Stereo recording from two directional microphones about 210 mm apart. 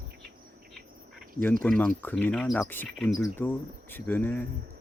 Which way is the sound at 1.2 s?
5° left (ahead or behind).